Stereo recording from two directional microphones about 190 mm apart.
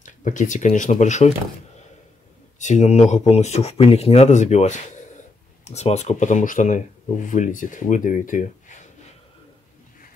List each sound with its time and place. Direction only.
0.0 s speech: 40° left (ahead or behind)
2.6 s speech: 35° left (ahead or behind)